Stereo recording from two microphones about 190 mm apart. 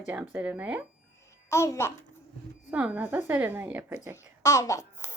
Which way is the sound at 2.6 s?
5° right (ahead or behind).